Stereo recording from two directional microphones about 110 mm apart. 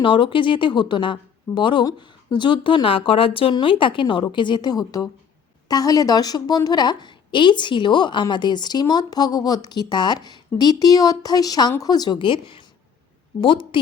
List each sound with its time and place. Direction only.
0.0 s a woman's voice: 50° left (ahead or behind)